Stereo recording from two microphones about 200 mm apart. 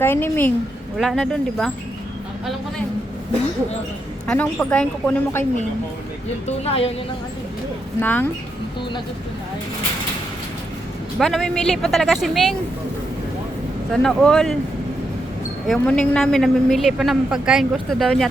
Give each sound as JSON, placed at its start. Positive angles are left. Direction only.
{"t": 0.0, "sound": "a woman's voice", "side_deg": 10}
{"t": 4.3, "sound": "a woman's voice", "side_deg": 5}
{"t": 6.7, "sound": "a woman's voice", "side_deg": 30}
{"t": 8.0, "sound": "a woman's voice", "side_deg": 10}
{"t": 11.2, "sound": "a man's voice", "side_deg": 0}
{"t": 13.9, "sound": "a man's voice", "side_deg": 0}
{"t": 15.6, "sound": "a man's voice", "side_deg": 0}